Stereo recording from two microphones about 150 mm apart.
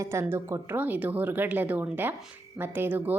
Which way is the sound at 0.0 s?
20° right (ahead or behind).